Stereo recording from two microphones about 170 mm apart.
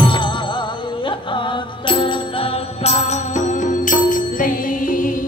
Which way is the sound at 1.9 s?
30° left (ahead or behind).